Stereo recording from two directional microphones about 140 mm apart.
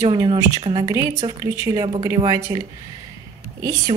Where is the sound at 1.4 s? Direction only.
25° right (ahead or behind).